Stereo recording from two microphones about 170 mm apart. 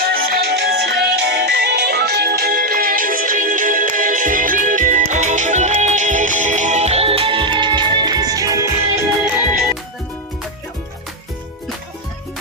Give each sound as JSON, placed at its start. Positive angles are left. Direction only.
{"t": 0.0, "sound": "music", "side_deg": -65}
{"t": 9.2, "sound": "music", "side_deg": -10}